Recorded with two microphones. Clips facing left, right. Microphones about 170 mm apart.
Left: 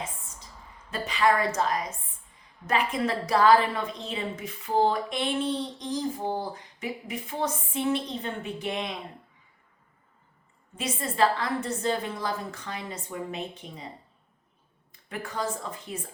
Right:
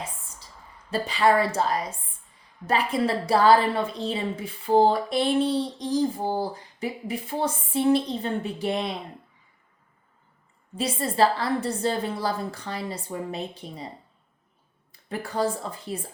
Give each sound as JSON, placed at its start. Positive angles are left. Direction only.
{"t": 0.9, "sound": "a woman's voice", "side_deg": -30}
{"t": 10.8, "sound": "a woman's voice", "side_deg": -35}
{"t": 15.1, "sound": "a woman's voice", "side_deg": -35}